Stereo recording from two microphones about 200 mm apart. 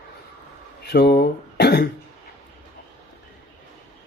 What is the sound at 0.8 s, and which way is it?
Speech, 55° left (ahead or behind).